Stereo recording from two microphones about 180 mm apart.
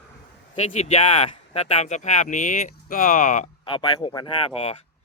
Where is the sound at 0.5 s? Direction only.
40° left (ahead or behind).